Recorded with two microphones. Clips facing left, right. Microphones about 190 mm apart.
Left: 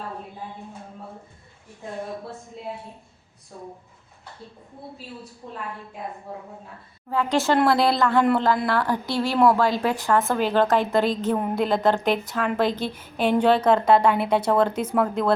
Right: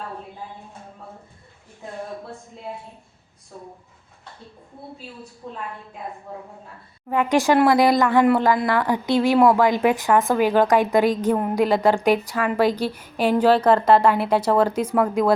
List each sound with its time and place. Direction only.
7.1 s a woman's voice: 15° right (ahead or behind)